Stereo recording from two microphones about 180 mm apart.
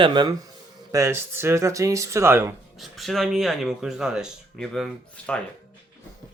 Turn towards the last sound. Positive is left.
turn(degrees=5)  # may be behind; listen again after turning